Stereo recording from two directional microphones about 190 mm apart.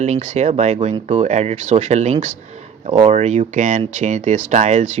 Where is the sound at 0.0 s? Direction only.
40° right (ahead or behind).